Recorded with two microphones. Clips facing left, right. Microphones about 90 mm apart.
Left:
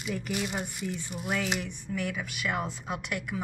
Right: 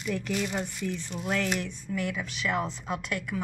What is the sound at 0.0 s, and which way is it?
A woman's voice, 15° left (ahead or behind).